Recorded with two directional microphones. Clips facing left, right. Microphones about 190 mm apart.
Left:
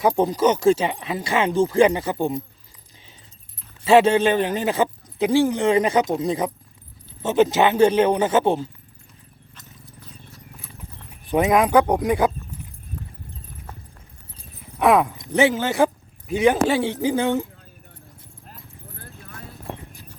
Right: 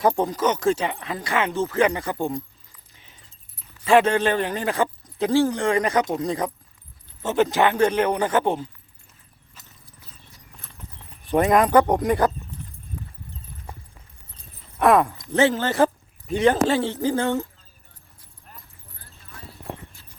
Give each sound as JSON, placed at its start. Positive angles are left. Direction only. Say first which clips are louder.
{"t": 0.2, "sound": "speech", "louder": "left 4 dB", "side_deg": 10}
{"t": 1.8, "sound": "speech", "louder": "left 2 dB", "side_deg": 25}
{"t": 3.8, "sound": "speech", "louder": "left 3 dB", "side_deg": 25}
{"t": 6.0, "sound": "speech", "louder": "left 2 dB", "side_deg": 5}
{"t": 6.2, "sound": "speech", "louder": "left 2 dB", "side_deg": 20}
{"t": 11.3, "sound": "speech", "louder": "even", "side_deg": 5}
{"t": 14.3, "sound": "horse", "louder": "even", "side_deg": 10}
{"t": 14.8, "sound": "speech", "louder": "even", "side_deg": 5}
{"t": 15.1, "sound": "speech", "louder": "left 1 dB", "side_deg": 15}
{"t": 18.9, "sound": "clip-clop", "louder": "left 10 dB", "side_deg": 55}